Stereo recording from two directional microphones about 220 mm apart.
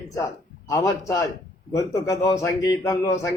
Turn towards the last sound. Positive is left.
turn(degrees=15)  # may be behind; listen again after turning